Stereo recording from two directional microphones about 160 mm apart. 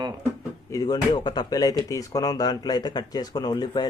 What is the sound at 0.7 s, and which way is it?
Speech, 20° left (ahead or behind).